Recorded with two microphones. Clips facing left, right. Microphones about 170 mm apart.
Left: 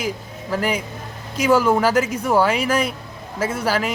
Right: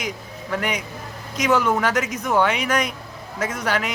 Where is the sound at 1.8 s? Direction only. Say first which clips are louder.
Left 4 dB; 30° left (ahead or behind).